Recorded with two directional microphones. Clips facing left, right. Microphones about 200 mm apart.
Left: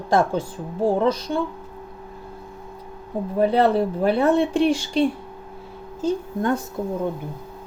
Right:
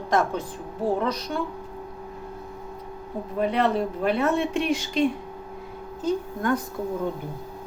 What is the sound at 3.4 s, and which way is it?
A woman's voice, 35° left (ahead or behind).